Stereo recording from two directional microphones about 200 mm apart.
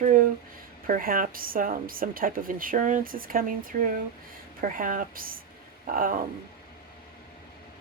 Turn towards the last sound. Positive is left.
turn(degrees=-45)  # may be behind; listen again after turning